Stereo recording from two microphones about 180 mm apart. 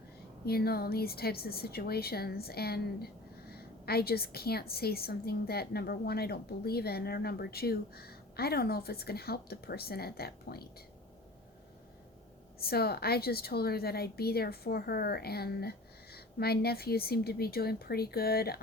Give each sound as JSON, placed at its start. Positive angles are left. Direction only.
{"t": 0.4, "sound": "a woman's voice", "side_deg": 60}
{"t": 12.5, "sound": "a woman's voice", "side_deg": 60}